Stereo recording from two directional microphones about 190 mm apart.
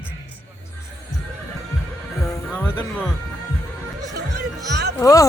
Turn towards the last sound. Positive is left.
turn(degrees=15)  # may be behind; listen again after turning